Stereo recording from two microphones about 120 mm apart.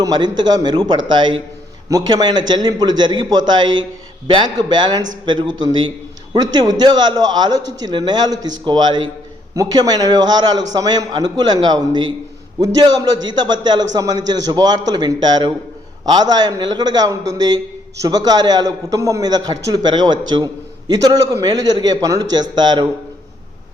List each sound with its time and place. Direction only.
0.0 s a man's voice: 35° right (ahead or behind)